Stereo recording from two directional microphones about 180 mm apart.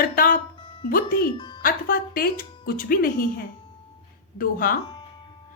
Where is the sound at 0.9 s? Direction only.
50° left (ahead or behind).